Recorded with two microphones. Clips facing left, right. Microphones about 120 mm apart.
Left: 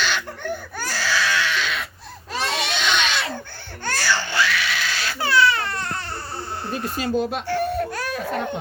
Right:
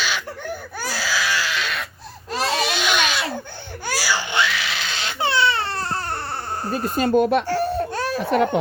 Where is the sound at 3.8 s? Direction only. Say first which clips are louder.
Even; 10° right (ahead or behind); by 6.0 s 35° right (ahead or behind).